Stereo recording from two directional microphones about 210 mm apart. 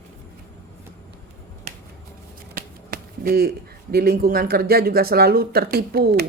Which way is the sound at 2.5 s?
45° right (ahead or behind).